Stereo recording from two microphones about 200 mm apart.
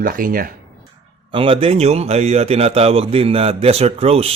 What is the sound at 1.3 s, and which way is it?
A man's voice, 25° right (ahead or behind).